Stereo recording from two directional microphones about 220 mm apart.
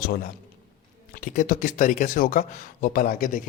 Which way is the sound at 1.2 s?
40° left (ahead or behind).